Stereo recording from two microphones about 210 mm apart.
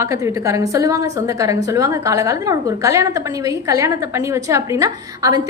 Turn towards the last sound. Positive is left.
turn(degrees=-15)  # may be behind; listen again after turning